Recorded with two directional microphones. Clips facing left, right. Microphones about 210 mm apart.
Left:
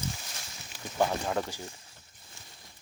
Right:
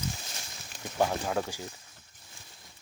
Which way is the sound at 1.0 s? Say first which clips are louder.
Even; 5° right (ahead or behind).